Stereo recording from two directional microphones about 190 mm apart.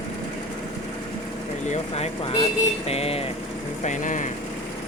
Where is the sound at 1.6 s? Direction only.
35° left (ahead or behind).